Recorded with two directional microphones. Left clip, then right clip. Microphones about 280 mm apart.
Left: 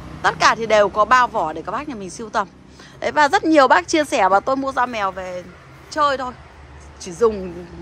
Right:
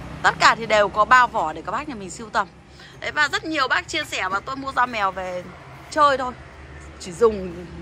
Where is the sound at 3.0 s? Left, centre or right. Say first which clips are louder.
Left 6 dB; left.